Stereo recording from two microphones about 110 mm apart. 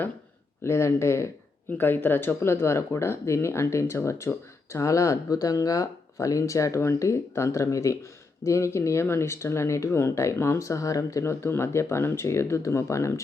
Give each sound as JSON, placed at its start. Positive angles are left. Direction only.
{"t": 0.6, "sound": "speech", "side_deg": 25}